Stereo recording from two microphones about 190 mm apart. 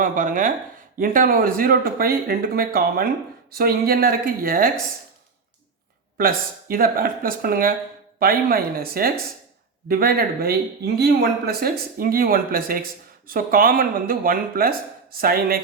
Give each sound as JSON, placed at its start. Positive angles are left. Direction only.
{"t": 0.0, "sound": "speech", "side_deg": -45}
{"t": 6.1, "sound": "speech", "side_deg": -50}